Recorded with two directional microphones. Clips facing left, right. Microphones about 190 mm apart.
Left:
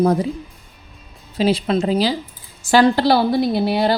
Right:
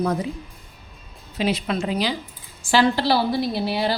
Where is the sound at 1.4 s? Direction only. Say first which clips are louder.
Left 6 dB; 30° left (ahead or behind).